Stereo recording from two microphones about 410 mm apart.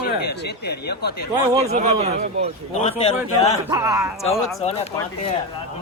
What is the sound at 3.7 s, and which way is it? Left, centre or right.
Speech, centre.